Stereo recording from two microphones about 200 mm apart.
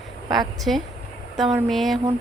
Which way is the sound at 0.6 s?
Centre (ahead or behind).